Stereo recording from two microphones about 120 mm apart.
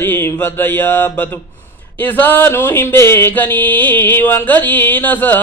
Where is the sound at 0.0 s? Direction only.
15° left (ahead or behind).